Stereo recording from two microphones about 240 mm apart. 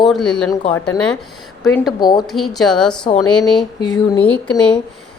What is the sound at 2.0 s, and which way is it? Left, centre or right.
Speech, centre.